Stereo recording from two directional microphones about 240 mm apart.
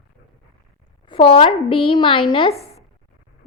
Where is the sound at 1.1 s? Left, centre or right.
Left.